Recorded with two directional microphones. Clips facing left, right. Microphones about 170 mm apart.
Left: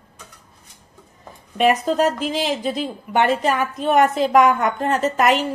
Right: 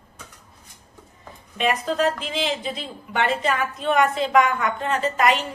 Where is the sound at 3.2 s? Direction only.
45° left (ahead or behind).